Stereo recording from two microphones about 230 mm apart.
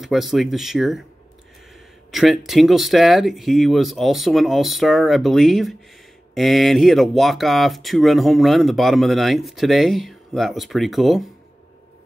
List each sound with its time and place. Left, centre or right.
0.0 s speech: centre
2.0 s speech: centre